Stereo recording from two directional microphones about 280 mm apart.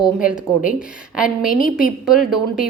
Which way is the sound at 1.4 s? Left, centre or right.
Left.